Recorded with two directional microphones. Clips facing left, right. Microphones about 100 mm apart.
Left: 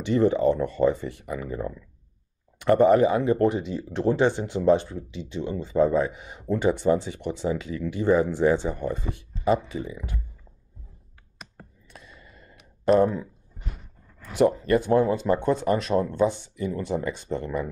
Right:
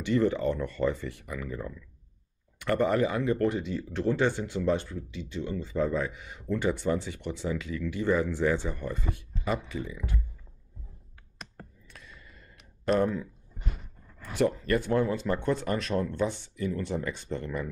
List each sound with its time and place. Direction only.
0.0 s speech: 25° left (ahead or behind)
11.9 s a sound: 20° left (ahead or behind)
13.0 s speech: 20° left (ahead or behind)
14.3 s speech: 20° left (ahead or behind)